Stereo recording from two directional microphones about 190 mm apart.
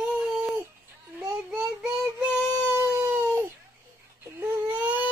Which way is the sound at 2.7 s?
10° right (ahead or behind).